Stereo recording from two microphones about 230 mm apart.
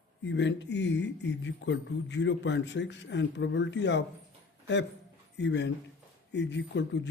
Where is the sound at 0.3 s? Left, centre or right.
Left.